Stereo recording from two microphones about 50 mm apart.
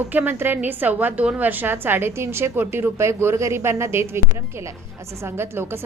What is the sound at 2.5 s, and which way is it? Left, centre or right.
Speech, right.